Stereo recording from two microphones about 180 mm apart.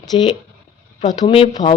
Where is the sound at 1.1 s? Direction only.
30° left (ahead or behind).